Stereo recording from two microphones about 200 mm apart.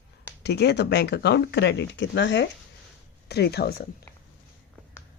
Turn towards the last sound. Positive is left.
turn(degrees=50)  # may be behind; listen again after turning